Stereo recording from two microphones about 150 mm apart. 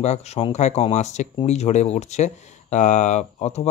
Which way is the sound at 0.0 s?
45° left (ahead or behind).